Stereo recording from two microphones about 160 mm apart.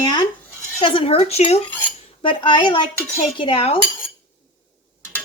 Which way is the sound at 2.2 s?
30° left (ahead or behind).